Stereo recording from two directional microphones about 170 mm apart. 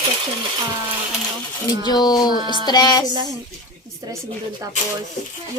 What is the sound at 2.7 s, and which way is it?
Speech, 25° left (ahead or behind).